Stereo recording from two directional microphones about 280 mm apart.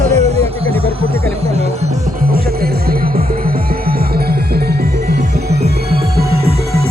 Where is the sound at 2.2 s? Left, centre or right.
Right.